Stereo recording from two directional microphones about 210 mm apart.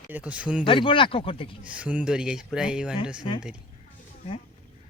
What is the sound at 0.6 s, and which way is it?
Speech, 25° left (ahead or behind).